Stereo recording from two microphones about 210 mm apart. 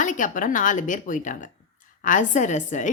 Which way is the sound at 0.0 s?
35° left (ahead or behind).